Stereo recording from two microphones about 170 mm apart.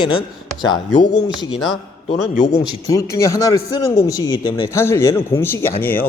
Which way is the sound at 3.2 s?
20° left (ahead or behind).